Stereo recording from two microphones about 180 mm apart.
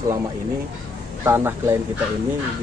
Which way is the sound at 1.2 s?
15° right (ahead or behind).